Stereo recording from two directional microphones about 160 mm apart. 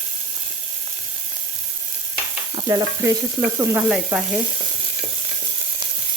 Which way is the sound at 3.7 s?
5° right (ahead or behind).